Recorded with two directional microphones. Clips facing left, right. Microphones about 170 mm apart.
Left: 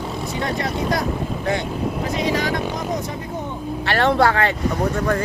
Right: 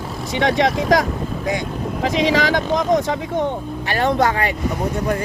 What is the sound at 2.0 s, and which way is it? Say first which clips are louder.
Speech: right 6 dB; 90° right.